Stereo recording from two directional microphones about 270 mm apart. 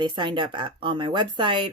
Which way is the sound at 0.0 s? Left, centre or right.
Centre.